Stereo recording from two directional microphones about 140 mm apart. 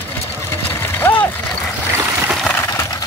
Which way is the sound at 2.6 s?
20° left (ahead or behind).